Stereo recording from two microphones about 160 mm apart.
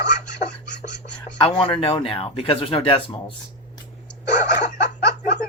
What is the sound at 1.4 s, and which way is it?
Speech, 35° left (ahead or behind).